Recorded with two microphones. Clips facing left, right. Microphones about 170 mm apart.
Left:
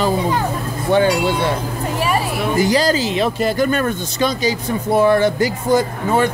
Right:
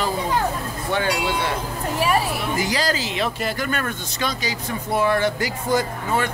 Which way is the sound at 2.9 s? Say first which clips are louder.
Left 7 dB; 35° left (ahead or behind).